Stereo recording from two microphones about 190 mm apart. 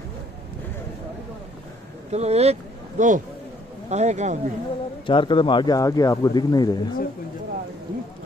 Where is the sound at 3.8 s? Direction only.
35° right (ahead or behind).